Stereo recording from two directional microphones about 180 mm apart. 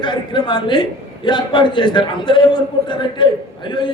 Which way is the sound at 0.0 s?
25° left (ahead or behind).